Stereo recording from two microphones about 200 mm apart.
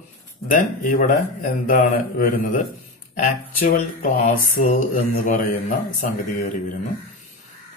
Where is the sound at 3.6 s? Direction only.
45° left (ahead or behind).